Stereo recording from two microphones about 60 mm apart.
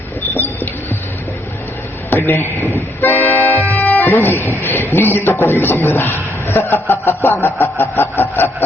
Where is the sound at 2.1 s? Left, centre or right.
Left.